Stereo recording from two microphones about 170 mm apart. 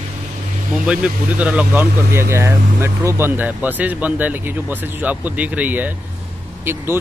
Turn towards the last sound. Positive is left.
turn(degrees=-15)  # may be behind; listen again after turning